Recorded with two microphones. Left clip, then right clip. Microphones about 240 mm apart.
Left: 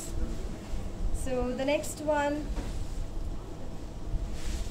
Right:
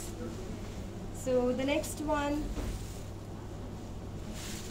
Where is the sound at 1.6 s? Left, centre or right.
Left.